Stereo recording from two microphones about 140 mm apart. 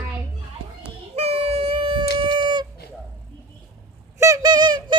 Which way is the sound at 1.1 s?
45° right (ahead or behind).